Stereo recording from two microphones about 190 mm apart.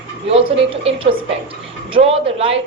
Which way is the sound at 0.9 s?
30° right (ahead or behind).